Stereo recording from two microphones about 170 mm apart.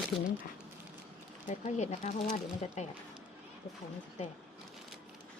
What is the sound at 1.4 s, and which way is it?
Speech, 45° left (ahead or behind).